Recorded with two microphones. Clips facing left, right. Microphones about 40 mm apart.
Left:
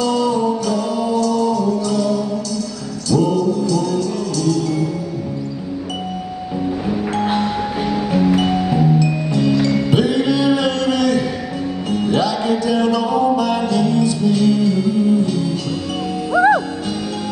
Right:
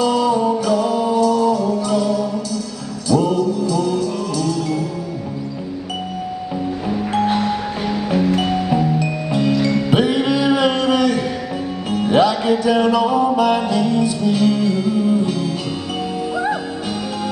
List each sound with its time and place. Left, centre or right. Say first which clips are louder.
0.0 s music: right 1 dB; centre
6.9 s music: right 2 dB; centre
9.0 s music: left 2 dB; centre
9.9 s a sound: even; centre
12.1 s music: right 4 dB; centre